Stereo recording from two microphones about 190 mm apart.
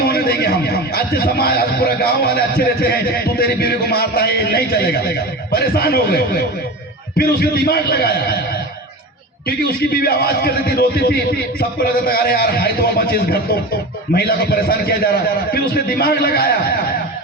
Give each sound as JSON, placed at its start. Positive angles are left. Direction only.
{"t": 0.0, "sound": "speech", "side_deg": 55}
{"t": 9.6, "sound": "a man's voice", "side_deg": 55}